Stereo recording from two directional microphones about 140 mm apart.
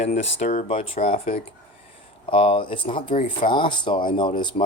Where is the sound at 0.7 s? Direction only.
40° left (ahead or behind).